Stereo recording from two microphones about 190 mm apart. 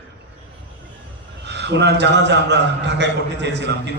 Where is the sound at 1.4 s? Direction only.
65° right (ahead or behind).